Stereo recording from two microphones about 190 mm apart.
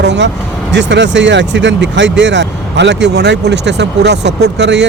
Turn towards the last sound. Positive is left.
turn(degrees=-65)  # may be behind; listen again after turning